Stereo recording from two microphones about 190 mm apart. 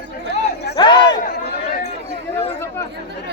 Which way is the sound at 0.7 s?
25° left (ahead or behind).